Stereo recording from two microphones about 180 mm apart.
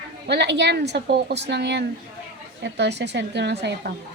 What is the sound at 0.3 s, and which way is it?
Speech, 70° right (ahead or behind).